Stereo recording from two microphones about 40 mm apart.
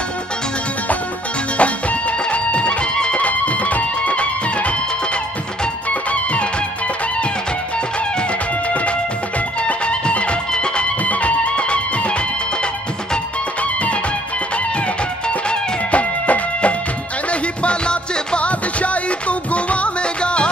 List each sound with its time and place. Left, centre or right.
1.6 s music: left
3.3 s music: left
5.9 s music: left
9.6 s music: left
15.9 s music: left